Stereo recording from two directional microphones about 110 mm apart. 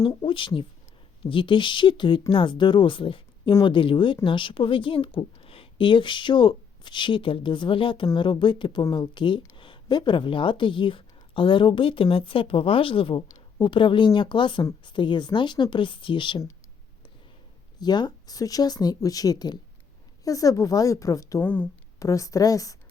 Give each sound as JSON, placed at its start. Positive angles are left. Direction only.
{"t": 0.3, "sound": "speech", "side_deg": 50}
{"t": 17.7, "sound": "speech", "side_deg": 40}
{"t": 21.4, "sound": "speech", "side_deg": 15}
{"t": 21.9, "sound": "speech", "side_deg": 30}